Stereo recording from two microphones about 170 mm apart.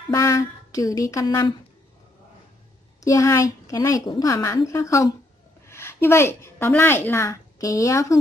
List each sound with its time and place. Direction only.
0.1 s a woman's voice: 20° left (ahead or behind)
3.0 s a woman's voice: 20° left (ahead or behind)